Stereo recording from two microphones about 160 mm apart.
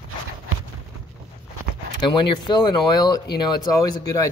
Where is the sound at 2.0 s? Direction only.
30° left (ahead or behind).